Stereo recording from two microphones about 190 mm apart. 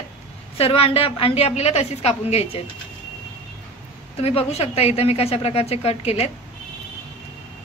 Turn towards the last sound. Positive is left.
turn(degrees=30)  # may be behind; listen again after turning